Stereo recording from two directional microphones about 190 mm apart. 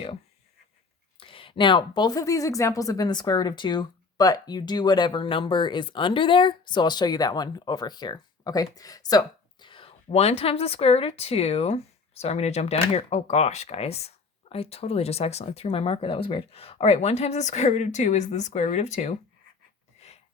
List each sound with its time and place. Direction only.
1.2 s speech: 30° left (ahead or behind)